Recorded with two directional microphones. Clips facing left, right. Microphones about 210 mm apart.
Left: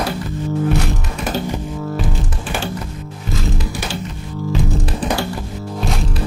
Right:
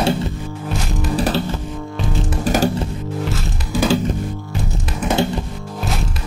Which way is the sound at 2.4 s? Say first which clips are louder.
Right 9 dB; 40° right (ahead or behind).